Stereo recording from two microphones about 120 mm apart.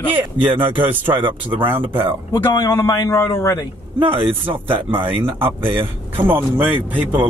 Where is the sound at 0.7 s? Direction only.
15° right (ahead or behind).